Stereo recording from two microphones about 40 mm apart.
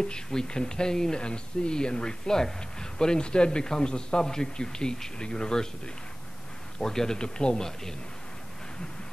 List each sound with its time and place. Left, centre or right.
0.0 s speech: centre
6.8 s speech: centre